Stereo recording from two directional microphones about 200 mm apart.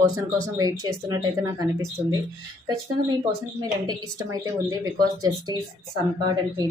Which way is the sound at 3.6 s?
20° right (ahead or behind).